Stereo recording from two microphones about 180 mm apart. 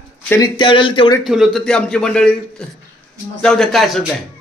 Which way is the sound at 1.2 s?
Centre (ahead or behind).